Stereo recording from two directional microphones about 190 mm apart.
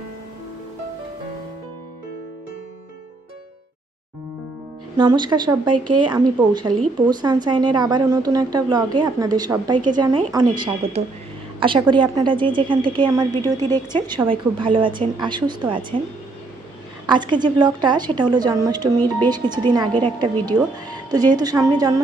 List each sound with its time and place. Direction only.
4.9 s a woman's voice: 25° right (ahead or behind)
11.9 s a woman's voice: 25° right (ahead or behind)
17.0 s a woman's voice: 25° right (ahead or behind)